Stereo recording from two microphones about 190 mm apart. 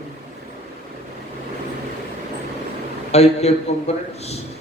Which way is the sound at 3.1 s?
35° left (ahead or behind).